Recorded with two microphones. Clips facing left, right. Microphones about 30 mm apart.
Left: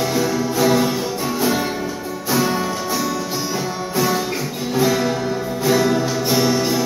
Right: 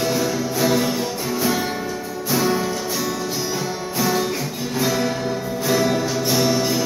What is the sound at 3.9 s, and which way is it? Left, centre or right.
Music, centre.